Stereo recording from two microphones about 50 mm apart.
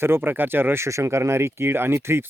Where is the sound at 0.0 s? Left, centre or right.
Right.